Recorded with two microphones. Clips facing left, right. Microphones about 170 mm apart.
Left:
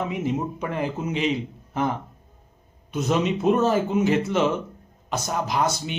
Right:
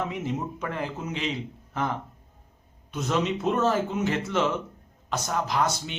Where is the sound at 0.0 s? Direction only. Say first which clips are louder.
Left 4 dB; 15° left (ahead or behind).